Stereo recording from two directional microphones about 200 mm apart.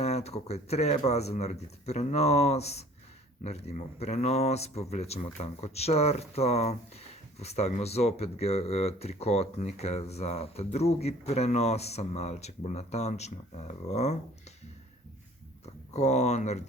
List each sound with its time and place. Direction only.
0.0 s speech: 30° left (ahead or behind)
15.6 s speech: 35° left (ahead or behind)